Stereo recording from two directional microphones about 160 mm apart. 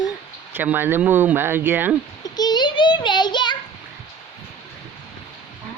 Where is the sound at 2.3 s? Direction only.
25° left (ahead or behind).